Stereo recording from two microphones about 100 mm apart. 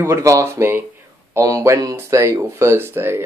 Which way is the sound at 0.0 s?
30° right (ahead or behind).